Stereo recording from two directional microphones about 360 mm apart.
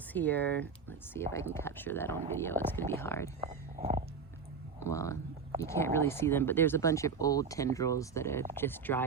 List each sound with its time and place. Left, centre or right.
0.1 s speech: centre
3.8 s a sound: right
4.8 s speech: centre